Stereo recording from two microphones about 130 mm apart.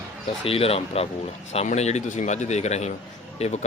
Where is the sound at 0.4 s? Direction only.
50° left (ahead or behind).